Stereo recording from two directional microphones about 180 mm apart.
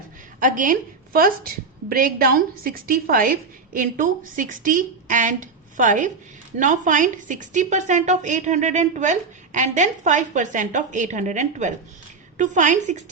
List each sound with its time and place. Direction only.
0.3 s a woman's voice: 45° right (ahead or behind)